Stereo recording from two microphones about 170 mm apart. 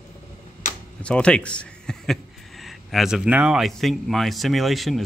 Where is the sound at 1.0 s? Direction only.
5° left (ahead or behind).